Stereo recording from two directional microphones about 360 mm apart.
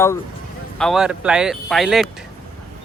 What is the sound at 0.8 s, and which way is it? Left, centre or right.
Speech, centre.